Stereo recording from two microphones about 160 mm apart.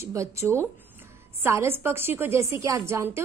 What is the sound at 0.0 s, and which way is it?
A woman's voice, 20° right (ahead or behind).